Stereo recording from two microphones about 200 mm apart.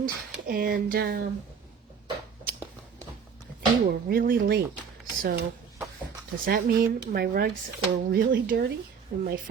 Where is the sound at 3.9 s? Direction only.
50° right (ahead or behind).